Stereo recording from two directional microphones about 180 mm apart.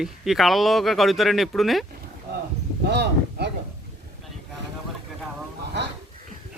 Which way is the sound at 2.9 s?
70° right (ahead or behind).